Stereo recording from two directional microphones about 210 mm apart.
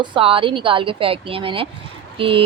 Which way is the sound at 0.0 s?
25° right (ahead or behind).